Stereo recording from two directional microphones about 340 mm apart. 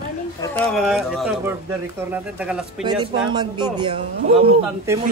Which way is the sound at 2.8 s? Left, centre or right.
Centre.